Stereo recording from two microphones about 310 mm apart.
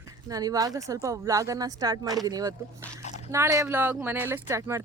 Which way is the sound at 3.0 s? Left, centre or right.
Left.